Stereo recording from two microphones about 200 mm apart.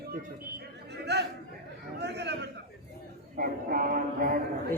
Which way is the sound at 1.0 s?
55° right (ahead or behind).